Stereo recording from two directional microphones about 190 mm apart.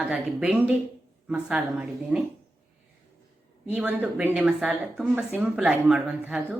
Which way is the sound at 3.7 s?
10° right (ahead or behind).